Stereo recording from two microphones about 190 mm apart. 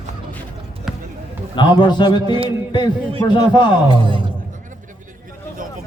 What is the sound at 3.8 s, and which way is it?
Music, 25° right (ahead or behind).